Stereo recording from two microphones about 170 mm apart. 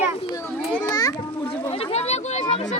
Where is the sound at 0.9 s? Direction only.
20° left (ahead or behind).